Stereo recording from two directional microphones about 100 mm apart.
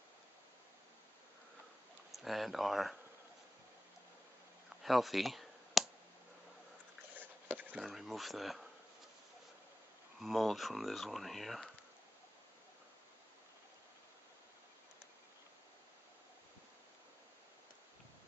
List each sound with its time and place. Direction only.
2.1 s speech: centre (ahead or behind)
4.8 s clicking: centre (ahead or behind)
7.2 s a sound: 15° right (ahead or behind)
7.8 s speech: centre (ahead or behind)
10.2 s speech: centre (ahead or behind)